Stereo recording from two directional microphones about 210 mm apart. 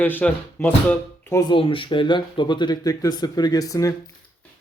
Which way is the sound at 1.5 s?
25° left (ahead or behind).